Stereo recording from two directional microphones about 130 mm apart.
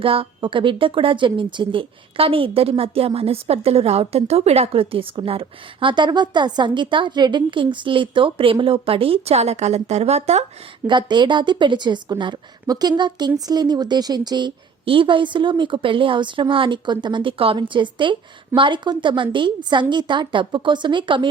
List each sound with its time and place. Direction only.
0.0 s speech: 45° right (ahead or behind)
10.8 s a woman's voice: 35° right (ahead or behind)